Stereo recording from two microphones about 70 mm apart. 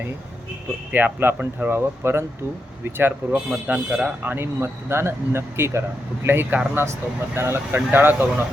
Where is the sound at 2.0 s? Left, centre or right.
Right.